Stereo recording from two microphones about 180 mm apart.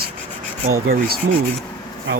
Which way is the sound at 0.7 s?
55° right (ahead or behind).